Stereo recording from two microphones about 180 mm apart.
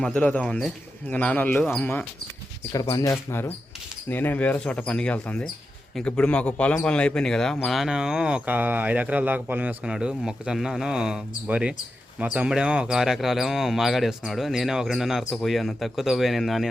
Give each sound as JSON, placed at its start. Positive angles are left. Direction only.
{"t": 0.0, "sound": "speech", "side_deg": 5}